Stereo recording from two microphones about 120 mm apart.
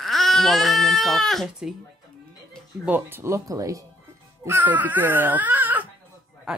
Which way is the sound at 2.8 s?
15° right (ahead or behind).